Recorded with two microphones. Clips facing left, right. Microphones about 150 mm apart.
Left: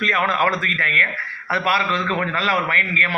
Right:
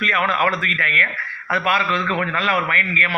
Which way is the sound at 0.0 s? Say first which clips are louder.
Even; 40° left (ahead or behind).